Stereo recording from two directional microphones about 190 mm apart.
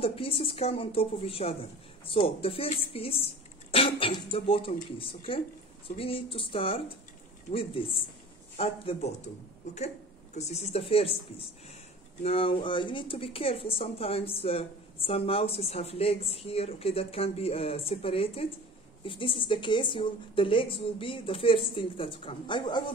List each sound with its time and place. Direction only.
0.0 s a woman's voice: 30° left (ahead or behind)